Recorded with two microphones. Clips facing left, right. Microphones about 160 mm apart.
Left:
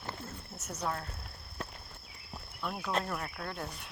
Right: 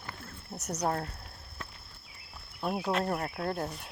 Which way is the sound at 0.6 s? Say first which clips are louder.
Right 6 dB; 40° right (ahead or behind).